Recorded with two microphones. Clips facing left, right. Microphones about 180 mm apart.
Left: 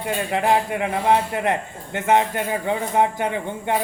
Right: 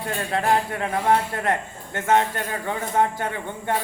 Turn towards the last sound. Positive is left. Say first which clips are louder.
# left 4 dB
turn(degrees=15)  # may be behind; listen again after turning